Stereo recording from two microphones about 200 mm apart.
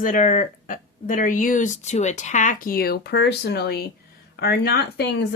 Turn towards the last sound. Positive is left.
turn(degrees=55)  # may be behind; listen again after turning